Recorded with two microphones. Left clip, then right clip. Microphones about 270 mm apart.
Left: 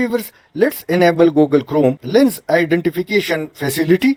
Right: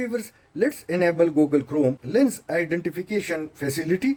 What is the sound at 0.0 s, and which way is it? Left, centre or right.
Speech, centre.